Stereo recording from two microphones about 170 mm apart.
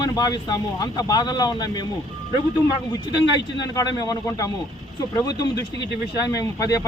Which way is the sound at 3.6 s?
25° left (ahead or behind).